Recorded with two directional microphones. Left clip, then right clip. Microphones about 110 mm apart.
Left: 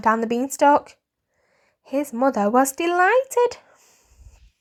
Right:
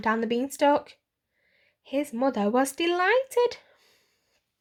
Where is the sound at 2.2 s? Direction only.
Centre (ahead or behind).